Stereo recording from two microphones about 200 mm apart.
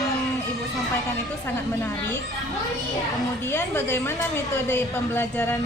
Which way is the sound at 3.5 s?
10° left (ahead or behind).